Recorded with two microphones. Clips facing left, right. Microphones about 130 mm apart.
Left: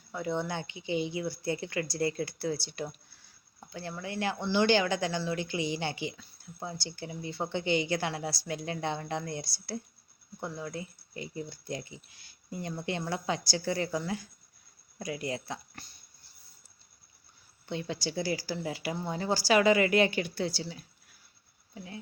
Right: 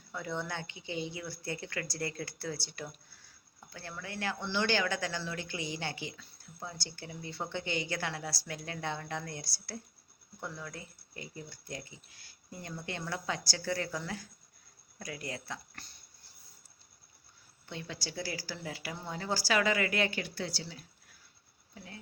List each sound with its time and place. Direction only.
0.1 s speech: 15° left (ahead or behind)
17.7 s speech: 20° left (ahead or behind)